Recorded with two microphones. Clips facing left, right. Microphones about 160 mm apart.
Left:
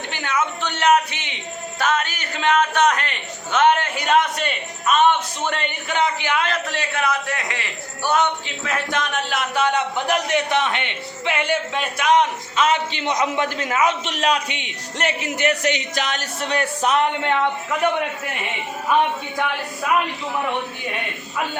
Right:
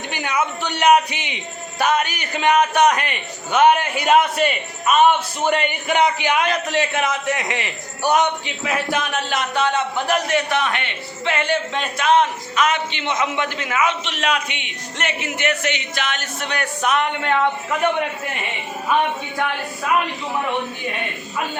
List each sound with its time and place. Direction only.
0.1 s a sound: 15° right (ahead or behind)
1.8 s a man's voice: 15° right (ahead or behind); by 9.6 s centre (ahead or behind)
9.6 s speech: 15° left (ahead or behind)
12.5 s a man's voice: 30° left (ahead or behind)